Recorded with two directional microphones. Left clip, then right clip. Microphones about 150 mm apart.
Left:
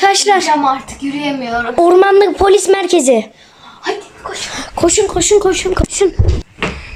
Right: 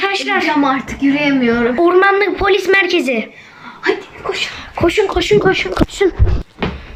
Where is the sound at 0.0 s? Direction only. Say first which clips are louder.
Left 5 dB; 40° left (ahead or behind).